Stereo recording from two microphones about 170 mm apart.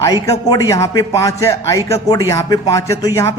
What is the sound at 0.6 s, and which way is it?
Speech, 20° left (ahead or behind).